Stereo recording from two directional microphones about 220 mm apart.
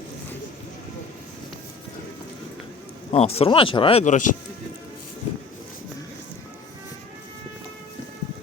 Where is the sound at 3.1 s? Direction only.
30° left (ahead or behind).